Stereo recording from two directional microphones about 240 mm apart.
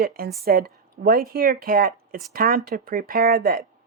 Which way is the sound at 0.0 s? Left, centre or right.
Right.